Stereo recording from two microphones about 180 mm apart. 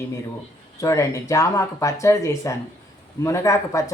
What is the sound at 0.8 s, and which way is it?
Speech, 15° left (ahead or behind).